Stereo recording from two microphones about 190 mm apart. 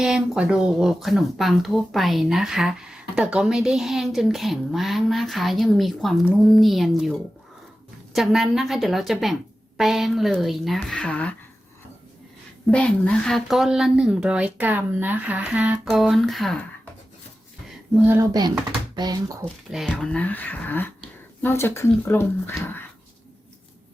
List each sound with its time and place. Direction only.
0.0 s speech: centre (ahead or behind)
12.7 s speech: 5° left (ahead or behind)
17.7 s a sound: 5° right (ahead or behind)
18.9 s speech: 20° right (ahead or behind)
19.7 s speech: centre (ahead or behind)